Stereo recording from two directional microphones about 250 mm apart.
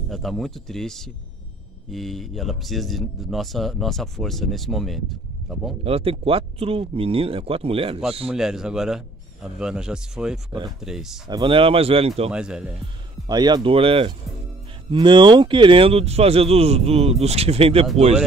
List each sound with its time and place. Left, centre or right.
0.1 s speech: centre
5.9 s speech: right
8.3 s speech: centre
11.2 s speech: centre
12.3 s speech: centre
12.8 s speech: centre